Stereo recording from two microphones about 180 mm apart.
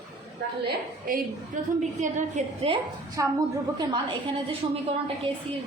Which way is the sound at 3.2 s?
20° right (ahead or behind).